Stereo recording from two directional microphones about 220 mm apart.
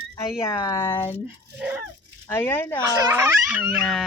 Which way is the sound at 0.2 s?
15° left (ahead or behind).